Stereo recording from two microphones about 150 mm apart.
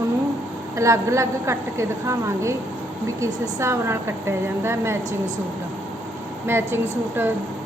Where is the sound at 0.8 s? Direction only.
20° right (ahead or behind).